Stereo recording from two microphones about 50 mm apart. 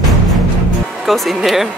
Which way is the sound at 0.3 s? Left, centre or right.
Centre.